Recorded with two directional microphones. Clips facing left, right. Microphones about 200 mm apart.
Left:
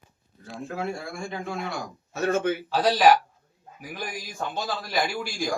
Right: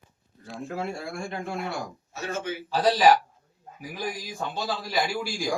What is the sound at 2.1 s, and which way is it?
Speech, 55° left (ahead or behind).